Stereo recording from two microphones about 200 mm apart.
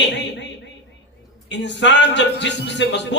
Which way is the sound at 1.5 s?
60° left (ahead or behind).